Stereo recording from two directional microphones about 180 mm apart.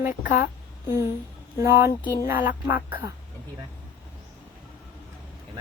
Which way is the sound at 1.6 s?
15° right (ahead or behind).